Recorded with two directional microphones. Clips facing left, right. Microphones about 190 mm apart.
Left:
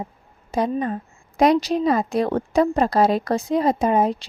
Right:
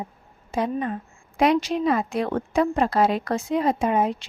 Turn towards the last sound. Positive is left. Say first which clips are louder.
# left 3 dB
turn(degrees=35)  # may be behind; listen again after turning